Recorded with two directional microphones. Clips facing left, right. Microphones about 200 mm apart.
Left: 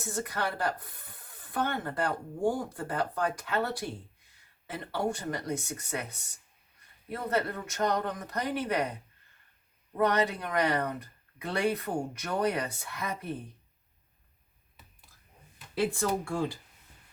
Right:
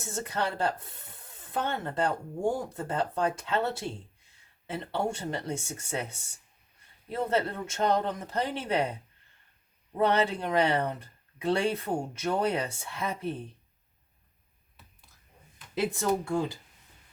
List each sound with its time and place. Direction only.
0.0 s speech: 25° right (ahead or behind)
10.0 s speech: 30° right (ahead or behind)
16.0 s speech: 20° right (ahead or behind)